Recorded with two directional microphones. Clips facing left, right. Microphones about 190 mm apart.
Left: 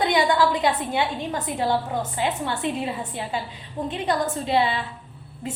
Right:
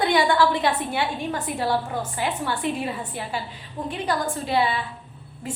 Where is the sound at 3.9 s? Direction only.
20° left (ahead or behind).